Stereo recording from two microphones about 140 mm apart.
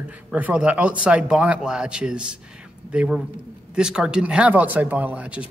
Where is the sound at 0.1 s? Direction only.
10° right (ahead or behind).